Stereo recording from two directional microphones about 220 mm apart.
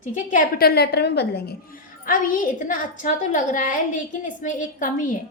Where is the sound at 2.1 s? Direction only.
35° left (ahead or behind).